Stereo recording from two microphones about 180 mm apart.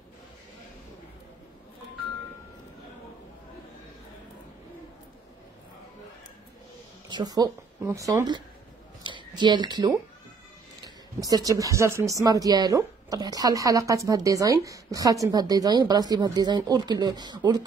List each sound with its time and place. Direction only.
7.1 s speech: 20° right (ahead or behind)
9.0 s a sound: 25° right (ahead or behind)
11.1 s a woman's voice: 20° right (ahead or behind)